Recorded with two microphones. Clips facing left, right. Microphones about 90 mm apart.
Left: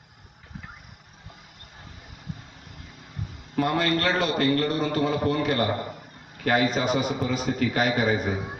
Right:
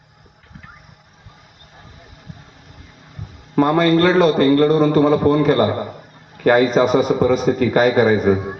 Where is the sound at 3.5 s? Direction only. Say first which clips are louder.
Right 10 dB; 40° right (ahead or behind).